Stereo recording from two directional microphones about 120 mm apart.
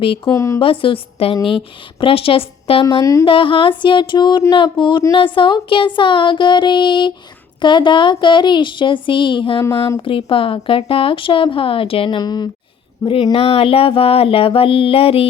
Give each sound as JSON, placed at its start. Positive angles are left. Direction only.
{"t": 0.3, "sound": "speech", "side_deg": 25}
{"t": 0.6, "sound": "a woman's voice", "side_deg": 50}
{"t": 3.0, "sound": "speech", "side_deg": 25}
{"t": 3.2, "sound": "a woman's voice", "side_deg": 45}
{"t": 13.3, "sound": "a woman's voice", "side_deg": 55}